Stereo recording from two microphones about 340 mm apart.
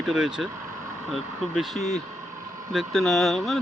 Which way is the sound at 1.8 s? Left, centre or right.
Centre.